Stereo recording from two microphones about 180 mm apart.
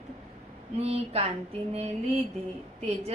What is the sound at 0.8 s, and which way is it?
Speech, 35° right (ahead or behind).